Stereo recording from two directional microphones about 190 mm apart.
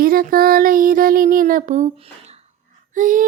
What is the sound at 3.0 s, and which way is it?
Speech, 45° right (ahead or behind).